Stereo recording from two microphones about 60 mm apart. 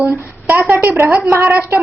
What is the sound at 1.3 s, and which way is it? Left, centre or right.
Speech, right.